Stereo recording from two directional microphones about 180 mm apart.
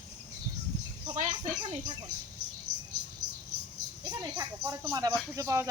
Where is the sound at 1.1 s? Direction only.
40° right (ahead or behind).